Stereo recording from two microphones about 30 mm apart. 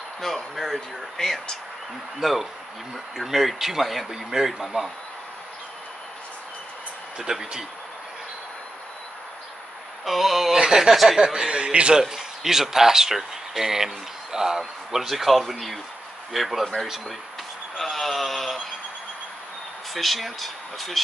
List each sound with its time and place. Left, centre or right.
0.2 s speech: centre
2.1 s speech: centre
4.1 s speech: centre
7.2 s speech: centre
10.0 s speech: centre
10.5 s speech: centre
11.5 s a man's voice: right
12.1 s speech: centre
17.7 s a sound: centre
19.9 s speech: centre